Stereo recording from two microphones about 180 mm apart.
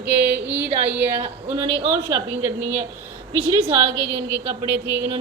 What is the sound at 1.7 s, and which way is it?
Speech, 30° right (ahead or behind).